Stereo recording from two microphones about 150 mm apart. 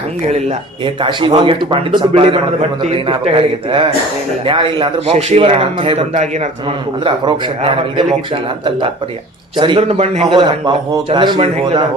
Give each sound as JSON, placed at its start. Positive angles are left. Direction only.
{"t": 1.0, "sound": "a man's voice", "side_deg": -35}
{"t": 7.0, "sound": "a man's voice", "side_deg": -35}
{"t": 9.6, "sound": "a man's voice", "side_deg": -40}